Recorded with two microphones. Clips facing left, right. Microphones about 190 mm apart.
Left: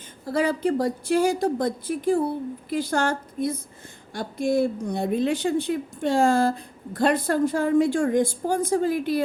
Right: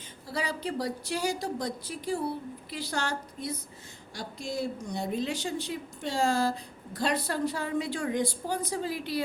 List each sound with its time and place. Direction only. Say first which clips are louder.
0.3 s a woman's voice: left 10 dB; 50° left (ahead or behind)